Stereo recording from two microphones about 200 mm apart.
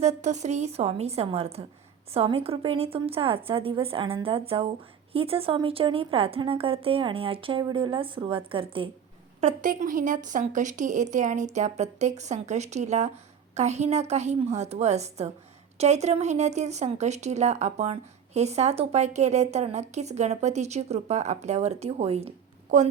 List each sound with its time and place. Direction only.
0.0 s a woman's voice: 35° right (ahead or behind)
9.4 s speech: 40° right (ahead or behind)